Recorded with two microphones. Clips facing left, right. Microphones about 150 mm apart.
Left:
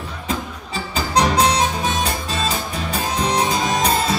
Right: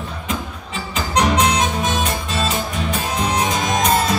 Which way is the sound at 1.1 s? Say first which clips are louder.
Even; 35° left (ahead or behind).